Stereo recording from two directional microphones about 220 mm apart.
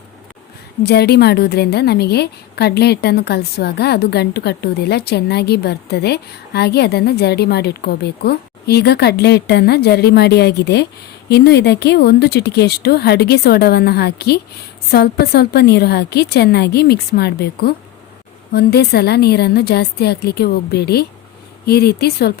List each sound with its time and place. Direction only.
0.8 s a woman's voice: 45° left (ahead or behind)